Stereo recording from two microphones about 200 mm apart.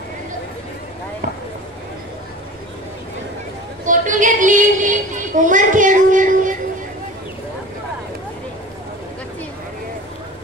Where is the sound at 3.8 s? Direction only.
40° right (ahead or behind).